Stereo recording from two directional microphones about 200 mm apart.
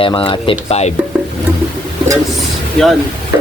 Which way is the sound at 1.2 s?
Centre (ahead or behind).